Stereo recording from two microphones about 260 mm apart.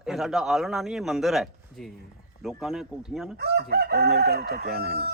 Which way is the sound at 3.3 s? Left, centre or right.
Right.